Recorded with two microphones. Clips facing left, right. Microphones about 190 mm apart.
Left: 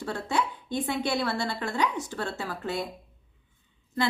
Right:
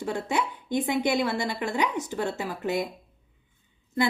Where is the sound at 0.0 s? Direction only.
15° right (ahead or behind).